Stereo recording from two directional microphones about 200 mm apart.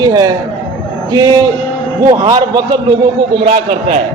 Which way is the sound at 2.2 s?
20° right (ahead or behind).